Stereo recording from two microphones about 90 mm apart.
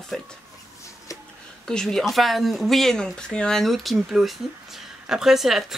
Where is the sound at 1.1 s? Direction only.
40° left (ahead or behind).